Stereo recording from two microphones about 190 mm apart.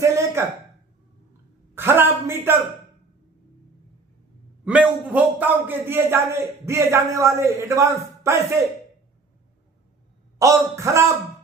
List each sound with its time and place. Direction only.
0.0 s a sound: 15° right (ahead or behind)
1.7 s a man's voice: 10° right (ahead or behind)
4.6 s a man's voice: 5° right (ahead or behind)
10.3 s a man's voice: 15° right (ahead or behind)